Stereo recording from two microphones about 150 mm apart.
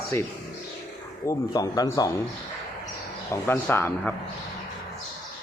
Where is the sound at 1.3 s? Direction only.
25° left (ahead or behind).